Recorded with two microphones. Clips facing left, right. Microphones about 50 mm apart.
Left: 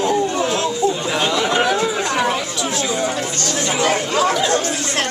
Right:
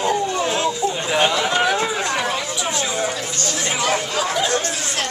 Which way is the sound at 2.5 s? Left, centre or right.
Centre.